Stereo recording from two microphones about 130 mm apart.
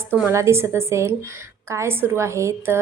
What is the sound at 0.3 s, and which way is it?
A woman's voice, 20° right (ahead or behind).